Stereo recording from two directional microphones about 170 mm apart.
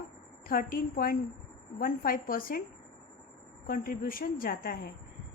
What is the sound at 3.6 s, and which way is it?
A woman's voice, 55° left (ahead or behind).